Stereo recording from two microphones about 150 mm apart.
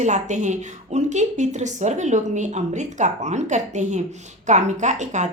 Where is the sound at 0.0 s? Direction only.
50° right (ahead or behind).